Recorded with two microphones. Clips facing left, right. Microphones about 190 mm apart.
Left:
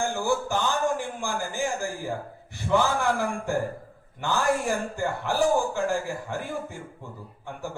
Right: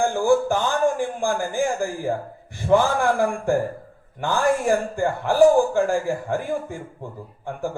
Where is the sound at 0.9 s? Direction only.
50° right (ahead or behind).